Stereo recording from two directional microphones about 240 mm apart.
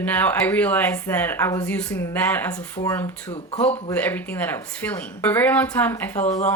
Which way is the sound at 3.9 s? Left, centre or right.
Centre.